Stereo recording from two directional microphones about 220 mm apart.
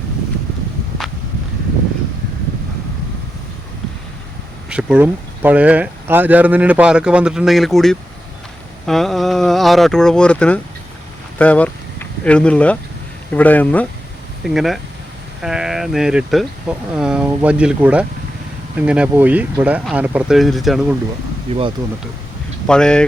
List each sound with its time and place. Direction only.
4.7 s speech: 5° right (ahead or behind)
11.3 s a sound: 5° left (ahead or behind)
13.3 s speech: 5° left (ahead or behind)
21.5 s speech: 25° right (ahead or behind)
22.6 s speech: 5° left (ahead or behind)